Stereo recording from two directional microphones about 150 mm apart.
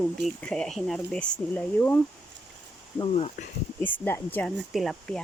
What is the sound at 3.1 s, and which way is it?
Speech, 45° left (ahead or behind).